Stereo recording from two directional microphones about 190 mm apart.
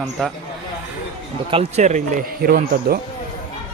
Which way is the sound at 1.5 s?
30° right (ahead or behind).